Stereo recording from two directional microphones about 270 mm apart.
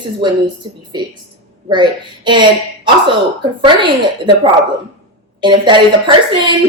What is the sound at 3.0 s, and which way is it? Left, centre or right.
Speech, centre.